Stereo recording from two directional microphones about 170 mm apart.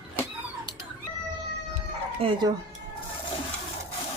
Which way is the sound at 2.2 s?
30° right (ahead or behind).